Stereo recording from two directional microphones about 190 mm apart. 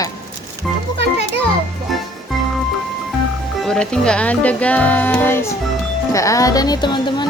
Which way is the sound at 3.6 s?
5° left (ahead or behind).